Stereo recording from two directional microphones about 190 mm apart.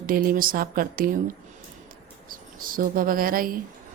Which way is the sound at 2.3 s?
45° right (ahead or behind).